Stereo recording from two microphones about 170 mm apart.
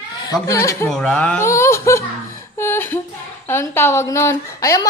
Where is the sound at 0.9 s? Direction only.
5° left (ahead or behind).